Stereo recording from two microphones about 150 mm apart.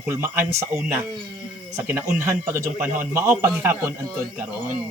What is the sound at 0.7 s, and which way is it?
Speech, 5° right (ahead or behind).